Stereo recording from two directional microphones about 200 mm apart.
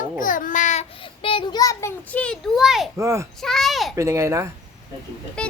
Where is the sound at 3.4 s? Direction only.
Centre (ahead or behind).